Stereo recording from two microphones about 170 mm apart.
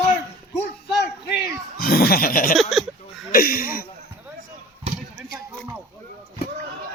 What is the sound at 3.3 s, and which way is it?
Laughter, 60° left (ahead or behind).